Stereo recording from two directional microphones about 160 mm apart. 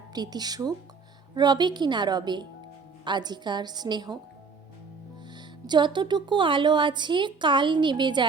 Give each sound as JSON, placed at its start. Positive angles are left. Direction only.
{"t": 0.1, "sound": "a woman's voice", "side_deg": -25}
{"t": 5.6, "sound": "a woman's voice", "side_deg": -30}